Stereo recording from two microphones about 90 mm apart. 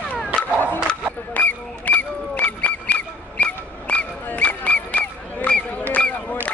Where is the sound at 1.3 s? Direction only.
15° left (ahead or behind).